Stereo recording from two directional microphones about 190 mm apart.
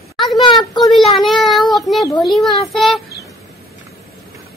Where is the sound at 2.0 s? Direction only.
20° left (ahead or behind).